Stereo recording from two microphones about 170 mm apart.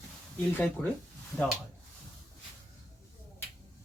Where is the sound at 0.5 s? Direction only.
10° left (ahead or behind).